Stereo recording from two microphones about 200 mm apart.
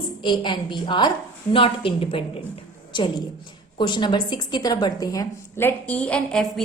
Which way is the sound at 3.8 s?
25° left (ahead or behind).